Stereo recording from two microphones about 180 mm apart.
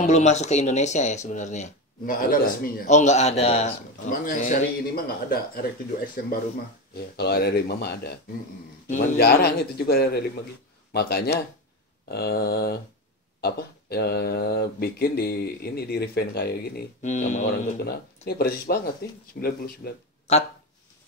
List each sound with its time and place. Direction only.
0.0 s speech: 40° left (ahead or behind)
4.1 s a man's voice: 50° left (ahead or behind)
8.8 s a man's voice: 45° left (ahead or behind)
9.1 s speech: 60° left (ahead or behind)
17.0 s speech: 40° left (ahead or behind)
17.5 s speech: 60° left (ahead or behind)
20.3 s speech: 35° left (ahead or behind)